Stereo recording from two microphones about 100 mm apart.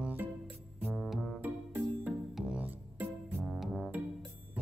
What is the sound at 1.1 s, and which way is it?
Music, 5° left (ahead or behind).